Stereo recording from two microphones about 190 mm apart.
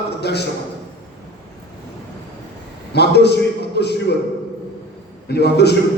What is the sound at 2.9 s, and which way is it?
A man's voice, 60° left (ahead or behind).